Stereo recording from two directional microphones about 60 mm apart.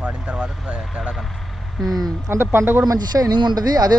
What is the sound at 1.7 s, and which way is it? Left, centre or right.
Speech, centre.